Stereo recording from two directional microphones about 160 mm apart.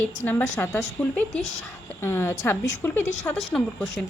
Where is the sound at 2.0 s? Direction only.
15° left (ahead or behind).